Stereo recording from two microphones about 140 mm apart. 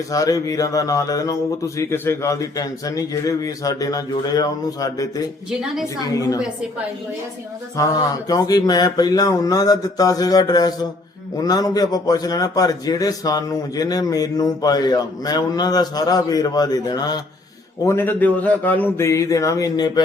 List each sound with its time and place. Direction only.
0.1 s a man's voice: 25° left (ahead or behind)
7.8 s a man's voice: 25° left (ahead or behind)
17.8 s a man's voice: 15° left (ahead or behind)